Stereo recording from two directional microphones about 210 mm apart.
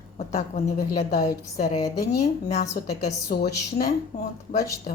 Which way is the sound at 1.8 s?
15° left (ahead or behind).